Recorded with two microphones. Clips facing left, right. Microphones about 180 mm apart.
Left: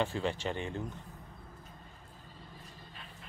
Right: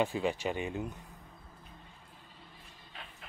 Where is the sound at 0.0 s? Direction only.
10° right (ahead or behind).